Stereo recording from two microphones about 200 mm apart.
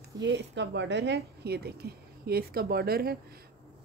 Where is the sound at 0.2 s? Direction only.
60° right (ahead or behind).